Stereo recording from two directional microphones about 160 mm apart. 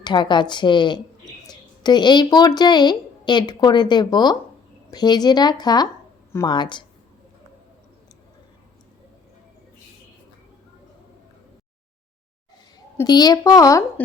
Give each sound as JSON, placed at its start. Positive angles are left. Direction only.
{"t": 0.0, "sound": "a woman's voice", "side_deg": 30}
{"t": 13.0, "sound": "a woman's voice", "side_deg": 25}